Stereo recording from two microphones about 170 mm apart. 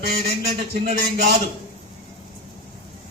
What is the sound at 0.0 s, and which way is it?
A man's voice, 65° right (ahead or behind).